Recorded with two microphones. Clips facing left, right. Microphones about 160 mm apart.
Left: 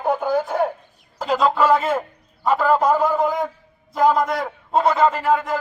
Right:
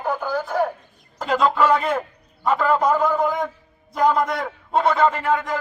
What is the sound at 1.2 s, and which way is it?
A man's voice, centre (ahead or behind).